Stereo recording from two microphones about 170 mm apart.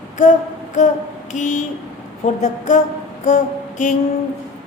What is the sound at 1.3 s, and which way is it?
A woman's voice, 45° left (ahead or behind).